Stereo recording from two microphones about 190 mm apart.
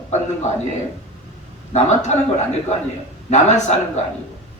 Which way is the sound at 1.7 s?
40° left (ahead or behind).